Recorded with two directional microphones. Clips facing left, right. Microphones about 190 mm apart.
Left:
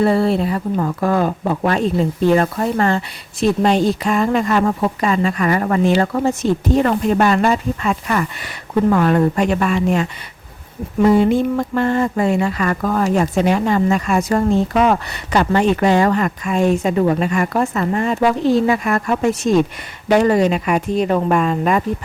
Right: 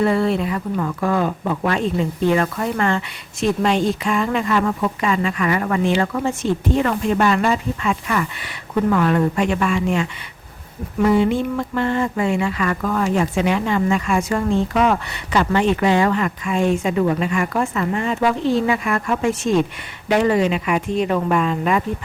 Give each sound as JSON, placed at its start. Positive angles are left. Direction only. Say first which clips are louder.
{"t": 0.0, "sound": "speech", "louder": "left 3 dB", "side_deg": 35}